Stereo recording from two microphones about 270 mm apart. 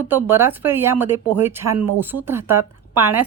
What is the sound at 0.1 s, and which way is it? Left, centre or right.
Speech, centre.